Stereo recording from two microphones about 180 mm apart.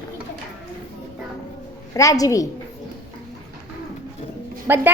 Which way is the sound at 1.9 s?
20° left (ahead or behind).